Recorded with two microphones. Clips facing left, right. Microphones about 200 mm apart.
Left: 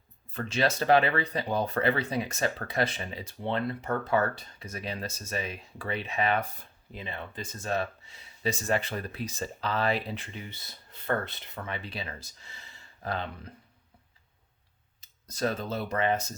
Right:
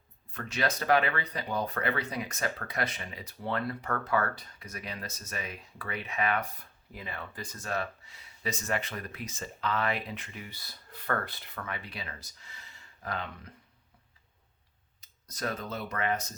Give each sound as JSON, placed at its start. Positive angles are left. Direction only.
{"t": 0.3, "sound": "speech", "side_deg": 25}
{"t": 15.0, "sound": "speech", "side_deg": 30}